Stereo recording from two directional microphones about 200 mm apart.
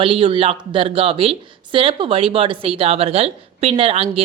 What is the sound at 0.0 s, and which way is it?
Speech, 25° right (ahead or behind).